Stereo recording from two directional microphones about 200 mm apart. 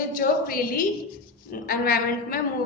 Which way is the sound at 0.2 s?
45° left (ahead or behind).